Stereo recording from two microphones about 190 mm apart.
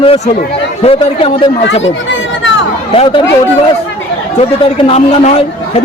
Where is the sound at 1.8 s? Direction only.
80° left.